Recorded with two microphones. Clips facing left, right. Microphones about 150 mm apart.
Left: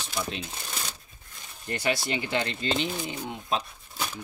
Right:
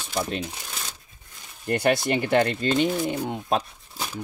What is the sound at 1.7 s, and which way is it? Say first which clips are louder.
Speech: right 7 dB; 55° right (ahead or behind).